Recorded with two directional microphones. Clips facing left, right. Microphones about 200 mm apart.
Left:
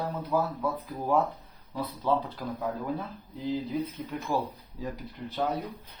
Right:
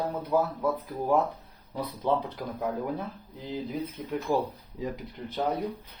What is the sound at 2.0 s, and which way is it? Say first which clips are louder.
Speech: even; 20° right (ahead or behind).